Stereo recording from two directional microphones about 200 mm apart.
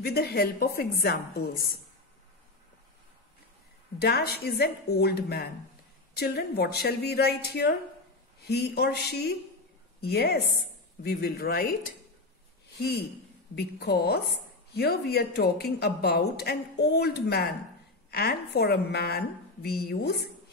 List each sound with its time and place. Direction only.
0.0 s a woman's voice: 50° left (ahead or behind)
4.0 s a woman's voice: 50° left (ahead or behind)